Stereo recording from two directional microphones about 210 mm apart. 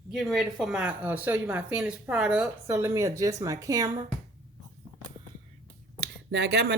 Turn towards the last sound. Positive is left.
turn(degrees=-50)  # may be behind; listen again after turning